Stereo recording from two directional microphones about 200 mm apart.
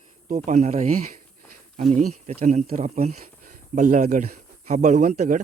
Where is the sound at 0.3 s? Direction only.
35° right (ahead or behind).